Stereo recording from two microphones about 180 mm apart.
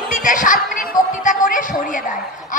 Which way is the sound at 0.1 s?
45° left (ahead or behind).